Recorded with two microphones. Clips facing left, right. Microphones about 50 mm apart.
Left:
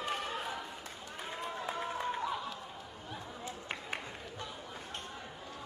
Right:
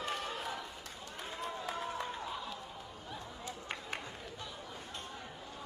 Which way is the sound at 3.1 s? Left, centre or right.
Centre.